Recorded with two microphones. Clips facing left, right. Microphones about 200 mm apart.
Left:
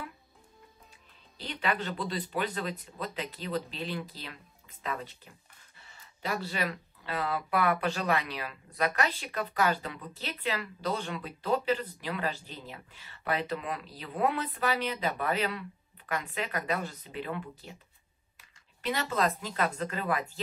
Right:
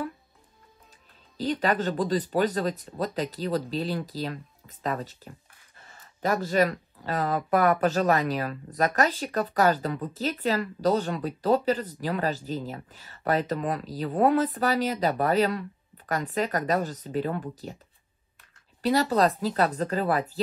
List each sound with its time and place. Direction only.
1.4 s speech: 40° right (ahead or behind)
18.8 s speech: 35° right (ahead or behind)